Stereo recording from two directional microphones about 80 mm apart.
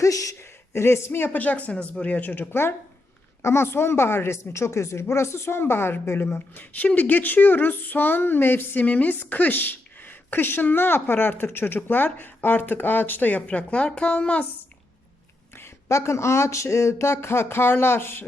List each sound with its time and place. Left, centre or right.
0.0 s a woman's voice: left; by 14.4 s centre
15.5 s speech: left